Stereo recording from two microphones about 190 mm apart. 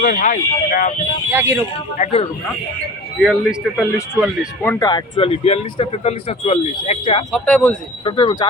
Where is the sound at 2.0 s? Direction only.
40° left (ahead or behind).